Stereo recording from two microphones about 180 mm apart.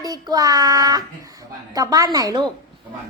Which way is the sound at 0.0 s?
20° right (ahead or behind).